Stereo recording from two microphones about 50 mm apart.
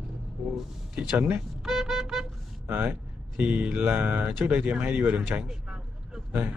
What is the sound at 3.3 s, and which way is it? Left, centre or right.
Speech, right.